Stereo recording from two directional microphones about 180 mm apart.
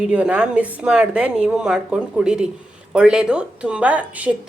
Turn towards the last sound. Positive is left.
turn(degrees=-10)  # may be behind; listen again after turning